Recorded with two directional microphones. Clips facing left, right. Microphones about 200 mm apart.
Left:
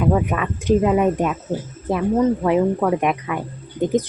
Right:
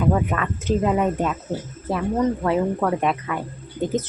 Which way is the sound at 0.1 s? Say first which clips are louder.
Left 2 dB; 15° left (ahead or behind).